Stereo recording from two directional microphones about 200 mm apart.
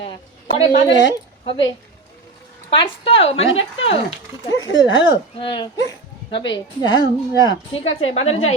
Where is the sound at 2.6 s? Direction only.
25° left (ahead or behind).